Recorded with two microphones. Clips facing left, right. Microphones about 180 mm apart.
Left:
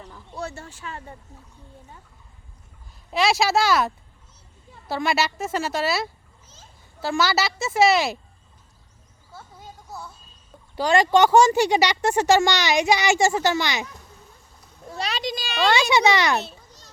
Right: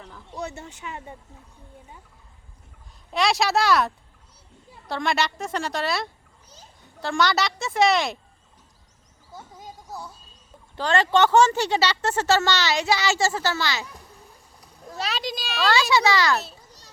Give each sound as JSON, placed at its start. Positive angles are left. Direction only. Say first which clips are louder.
{"t": 0.0, "sound": "a sound", "louder": "left 1 dB", "side_deg": 10}
{"t": 0.3, "sound": "speech", "louder": "even", "side_deg": -20}
{"t": 3.1, "sound": "a woman's voice", "louder": "left 2 dB", "side_deg": 0}
{"t": 9.3, "sound": "a sound", "louder": "right 2 dB", "side_deg": -15}
{"t": 10.8, "sound": "speech", "louder": "left 3 dB", "side_deg": 10}
{"t": 14.8, "sound": "speech", "louder": "left 1 dB", "side_deg": 0}
{"t": 15.7, "sound": "speech", "louder": "left 1 dB", "side_deg": 20}